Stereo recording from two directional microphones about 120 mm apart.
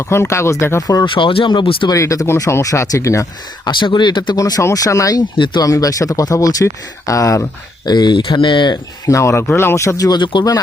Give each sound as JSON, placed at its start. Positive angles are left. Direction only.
{"t": 0.0, "sound": "speech", "side_deg": 25}
{"t": 1.0, "sound": "speech", "side_deg": 45}
{"t": 1.9, "sound": "speech", "side_deg": 30}
{"t": 3.7, "sound": "speech", "side_deg": 40}
{"t": 9.0, "sound": "speech", "side_deg": 25}